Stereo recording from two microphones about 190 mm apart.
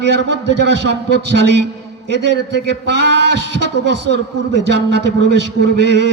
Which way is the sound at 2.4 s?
60° right (ahead or behind).